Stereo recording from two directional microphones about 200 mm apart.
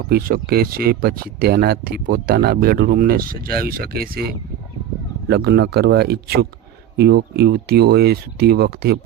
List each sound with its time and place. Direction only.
0.1 s speech: 50° right (ahead or behind)
5.3 s speech: 55° right (ahead or behind)